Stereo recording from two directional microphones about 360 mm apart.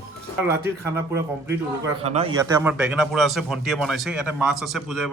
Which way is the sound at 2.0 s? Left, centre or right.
Centre.